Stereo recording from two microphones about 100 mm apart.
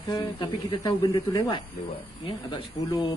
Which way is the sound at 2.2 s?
50° left (ahead or behind).